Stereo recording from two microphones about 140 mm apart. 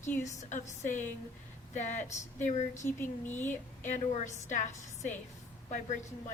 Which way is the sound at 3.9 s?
60° left (ahead or behind).